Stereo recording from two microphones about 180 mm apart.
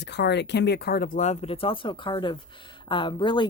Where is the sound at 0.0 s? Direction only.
70° left (ahead or behind).